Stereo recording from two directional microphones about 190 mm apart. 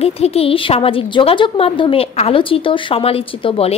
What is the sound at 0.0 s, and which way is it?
A woman's voice, 30° left (ahead or behind).